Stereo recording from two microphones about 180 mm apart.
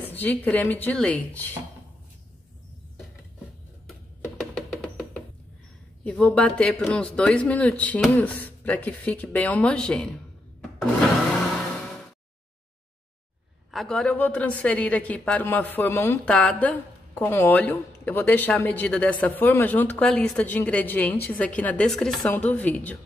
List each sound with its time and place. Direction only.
0.0 s a woman's voice: 10° left (ahead or behind)
4.4 s music: centre (ahead or behind)
6.0 s a woman's voice: 5° left (ahead or behind)
13.7 s a woman's voice: centre (ahead or behind)